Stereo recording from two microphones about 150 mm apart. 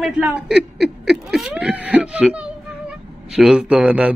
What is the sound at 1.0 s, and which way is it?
Wail, 5° right (ahead or behind).